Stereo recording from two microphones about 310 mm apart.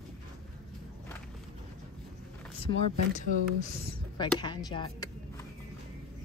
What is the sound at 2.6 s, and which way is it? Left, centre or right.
Speech, centre.